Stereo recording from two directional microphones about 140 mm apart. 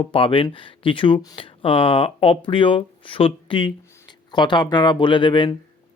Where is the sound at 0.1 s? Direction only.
40° left (ahead or behind).